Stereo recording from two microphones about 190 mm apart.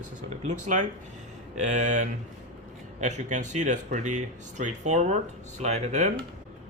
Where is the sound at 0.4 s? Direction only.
40° right (ahead or behind).